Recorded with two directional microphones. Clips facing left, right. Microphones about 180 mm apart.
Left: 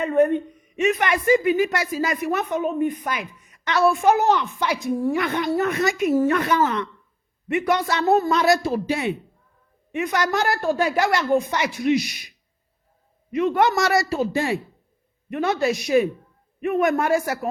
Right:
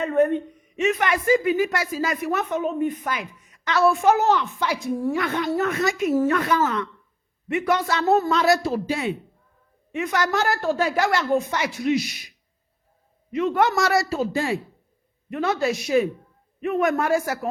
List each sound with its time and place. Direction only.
0.0 s a woman's voice: 15° left (ahead or behind)
13.3 s a woman's voice: 15° left (ahead or behind)